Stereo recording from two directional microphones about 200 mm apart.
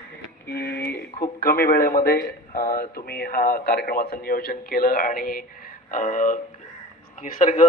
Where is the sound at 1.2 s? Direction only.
50° left (ahead or behind).